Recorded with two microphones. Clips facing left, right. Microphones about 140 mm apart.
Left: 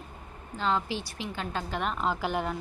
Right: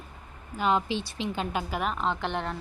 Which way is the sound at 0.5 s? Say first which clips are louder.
Right 3 dB; 15° right (ahead or behind).